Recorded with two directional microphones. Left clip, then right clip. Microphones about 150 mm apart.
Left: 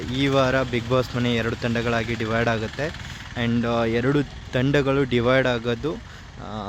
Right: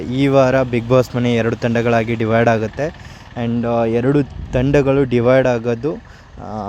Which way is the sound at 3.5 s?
25° right (ahead or behind).